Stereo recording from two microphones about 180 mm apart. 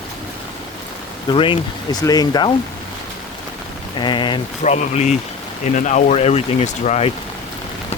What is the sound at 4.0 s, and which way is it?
Speech, 25° left (ahead or behind).